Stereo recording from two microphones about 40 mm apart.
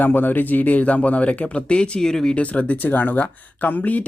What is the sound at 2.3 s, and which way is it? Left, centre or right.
Speech, left.